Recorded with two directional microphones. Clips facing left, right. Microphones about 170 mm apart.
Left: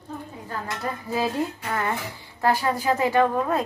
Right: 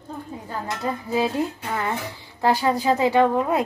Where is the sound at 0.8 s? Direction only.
15° right (ahead or behind).